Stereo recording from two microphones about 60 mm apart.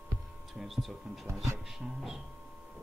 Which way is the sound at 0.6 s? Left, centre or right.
Centre.